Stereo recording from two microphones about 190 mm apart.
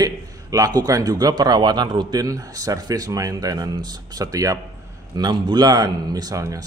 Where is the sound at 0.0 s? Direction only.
20° right (ahead or behind).